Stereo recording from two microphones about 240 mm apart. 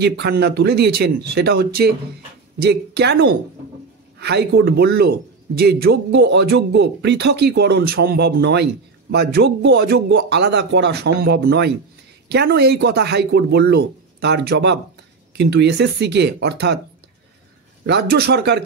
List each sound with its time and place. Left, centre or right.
0.0 s speech: right
17.8 s speech: right